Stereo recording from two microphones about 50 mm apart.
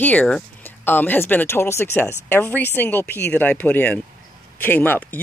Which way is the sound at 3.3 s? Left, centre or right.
Left.